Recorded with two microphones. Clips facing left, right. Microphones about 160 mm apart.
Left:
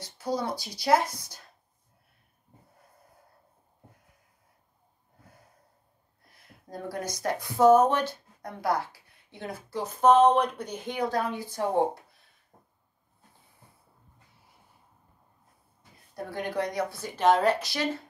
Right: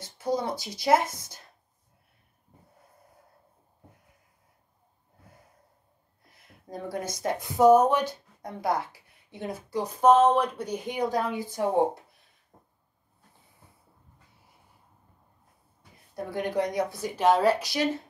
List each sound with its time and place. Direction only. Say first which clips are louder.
0.0 s speech: right 2 dB; 20° right (ahead or behind)
6.7 s speech: right 1 dB; 25° right (ahead or behind)
16.4 s speech: right 2 dB; 20° right (ahead or behind)